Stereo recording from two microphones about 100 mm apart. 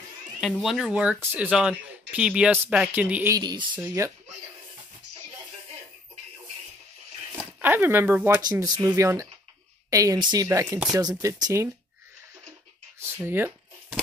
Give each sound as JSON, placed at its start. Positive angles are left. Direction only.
{"t": 0.4, "sound": "speech", "side_deg": 0}
{"t": 0.9, "sound": "speech", "side_deg": -15}
{"t": 1.5, "sound": "speech", "side_deg": -10}
{"t": 3.3, "sound": "speech", "side_deg": -45}
{"t": 3.8, "sound": "speech", "side_deg": -30}
{"t": 7.3, "sound": "speech", "side_deg": -20}
{"t": 8.4, "sound": "speech", "side_deg": -40}
{"t": 10.1, "sound": "speech", "side_deg": -45}
{"t": 13.2, "sound": "speech", "side_deg": -20}